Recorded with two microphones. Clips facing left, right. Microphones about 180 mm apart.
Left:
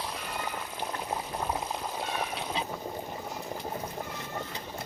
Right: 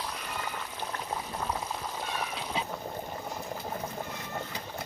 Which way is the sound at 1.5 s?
15° left (ahead or behind).